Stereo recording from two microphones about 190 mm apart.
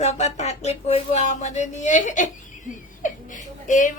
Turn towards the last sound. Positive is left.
turn(degrees=40)  # may be behind; listen again after turning